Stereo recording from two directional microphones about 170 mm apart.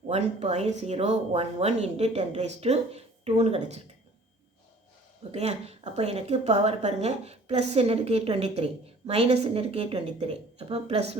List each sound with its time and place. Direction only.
0.1 s speech: 40° right (ahead or behind)
5.3 s speech: 40° right (ahead or behind)